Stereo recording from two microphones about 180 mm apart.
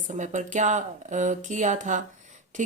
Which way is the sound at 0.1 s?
40° right (ahead or behind).